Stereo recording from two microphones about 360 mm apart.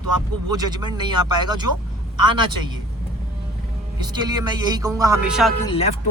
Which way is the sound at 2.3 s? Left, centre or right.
Right.